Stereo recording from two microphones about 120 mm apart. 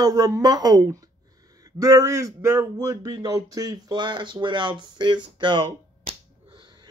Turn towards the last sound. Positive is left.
turn(degrees=-40)  # may be behind; listen again after turning